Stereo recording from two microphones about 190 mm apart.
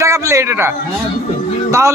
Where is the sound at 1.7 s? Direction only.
15° right (ahead or behind).